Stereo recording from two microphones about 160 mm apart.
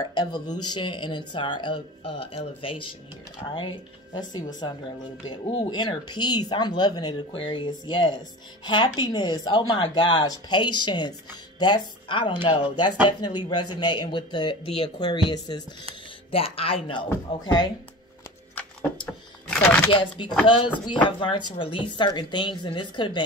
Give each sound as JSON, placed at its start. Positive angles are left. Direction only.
{"t": 0.0, "sound": "speech", "side_deg": 25}
{"t": 18.5, "sound": "a sound", "side_deg": 10}
{"t": 19.5, "sound": "speech", "side_deg": 5}
{"t": 19.9, "sound": "speech", "side_deg": 30}